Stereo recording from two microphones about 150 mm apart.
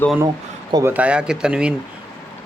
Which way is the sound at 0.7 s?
20° right (ahead or behind).